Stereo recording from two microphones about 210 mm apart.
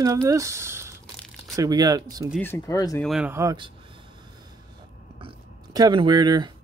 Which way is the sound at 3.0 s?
5° right (ahead or behind).